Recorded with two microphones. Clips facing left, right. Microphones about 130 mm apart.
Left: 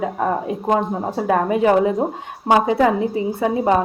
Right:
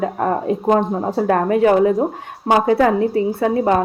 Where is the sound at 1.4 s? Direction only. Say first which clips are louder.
Right 3 dB; 20° left (ahead or behind).